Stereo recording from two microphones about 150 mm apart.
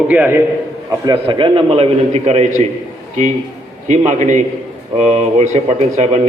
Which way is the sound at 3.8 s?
50° right (ahead or behind).